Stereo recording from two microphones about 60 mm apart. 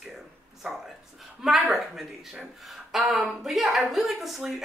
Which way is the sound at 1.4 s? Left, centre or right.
Centre.